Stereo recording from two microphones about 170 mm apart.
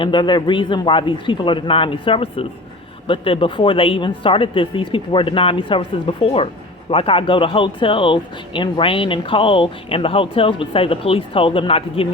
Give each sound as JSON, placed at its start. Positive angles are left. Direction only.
{"t": 0.0, "sound": "a man's voice", "side_deg": 25}